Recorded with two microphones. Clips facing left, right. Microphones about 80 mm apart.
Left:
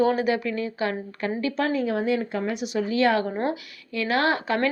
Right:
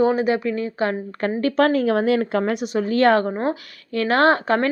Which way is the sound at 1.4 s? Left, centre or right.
Right.